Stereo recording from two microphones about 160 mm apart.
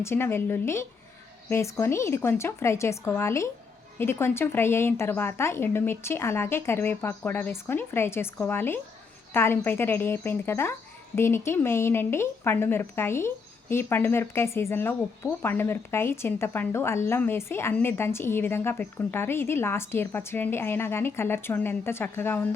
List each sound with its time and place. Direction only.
0.0 s a woman's voice: 15° left (ahead or behind)